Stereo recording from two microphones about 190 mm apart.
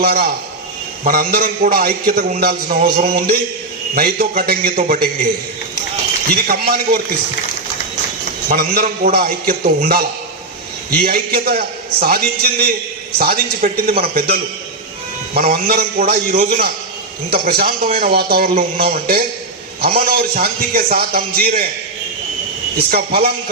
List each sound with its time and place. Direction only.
0.0 s a man's voice: 55° right (ahead or behind)
6.3 s a man's voice: 50° right (ahead or behind)
8.4 s a man's voice: 50° right (ahead or behind)
22.9 s a man's voice: 55° right (ahead or behind)